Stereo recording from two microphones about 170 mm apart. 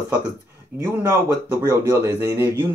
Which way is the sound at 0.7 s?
15° right (ahead or behind).